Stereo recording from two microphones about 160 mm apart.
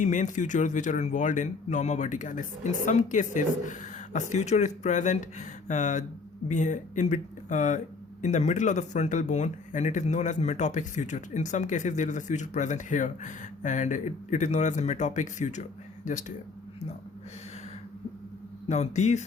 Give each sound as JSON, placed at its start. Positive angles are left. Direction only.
{"t": 0.0, "sound": "speech", "side_deg": 50}
{"t": 18.7, "sound": "speech", "side_deg": 45}